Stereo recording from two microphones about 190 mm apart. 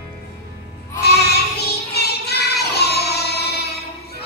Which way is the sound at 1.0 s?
60° left (ahead or behind).